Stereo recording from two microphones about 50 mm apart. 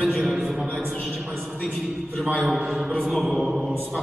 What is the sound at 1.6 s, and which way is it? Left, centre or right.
Speech, centre.